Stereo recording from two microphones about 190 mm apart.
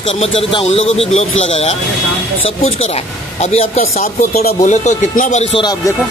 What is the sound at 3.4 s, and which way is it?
Speech, 35° left (ahead or behind).